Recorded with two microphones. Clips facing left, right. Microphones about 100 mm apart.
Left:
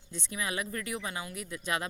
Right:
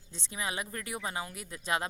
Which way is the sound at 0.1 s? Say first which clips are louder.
Left 1 dB; 30° right (ahead or behind).